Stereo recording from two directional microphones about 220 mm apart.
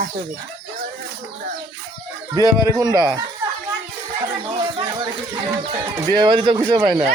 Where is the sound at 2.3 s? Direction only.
15° right (ahead or behind).